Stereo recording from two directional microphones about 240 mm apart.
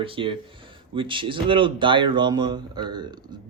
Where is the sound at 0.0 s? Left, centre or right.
Right.